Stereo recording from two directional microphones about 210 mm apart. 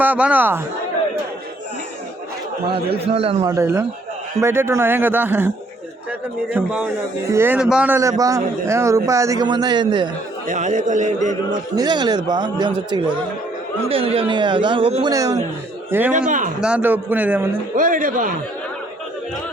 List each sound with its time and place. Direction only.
0.0 s speech: 5° right (ahead or behind)
3.1 s a man's voice: 30° right (ahead or behind)
3.4 s a man's voice: 15° right (ahead or behind)
10.4 s a man's voice: 35° right (ahead or behind)
11.8 s a man's voice: 20° right (ahead or behind)
17.7 s a man's voice: 40° right (ahead or behind)